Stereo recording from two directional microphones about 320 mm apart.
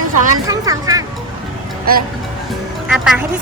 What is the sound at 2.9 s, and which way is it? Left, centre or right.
Speech, centre.